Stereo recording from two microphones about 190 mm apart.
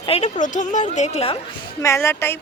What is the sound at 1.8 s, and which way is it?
Speech, 15° left (ahead or behind).